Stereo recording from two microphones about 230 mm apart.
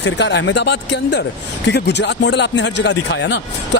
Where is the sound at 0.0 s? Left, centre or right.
Left.